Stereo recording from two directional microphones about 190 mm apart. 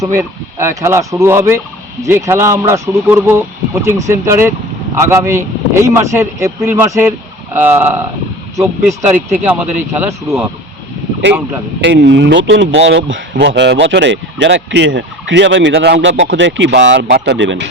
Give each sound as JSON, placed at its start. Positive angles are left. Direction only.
{"t": 0.0, "sound": "speech", "side_deg": -15}
{"t": 11.8, "sound": "speech", "side_deg": -70}
{"t": 13.4, "sound": "speech", "side_deg": -65}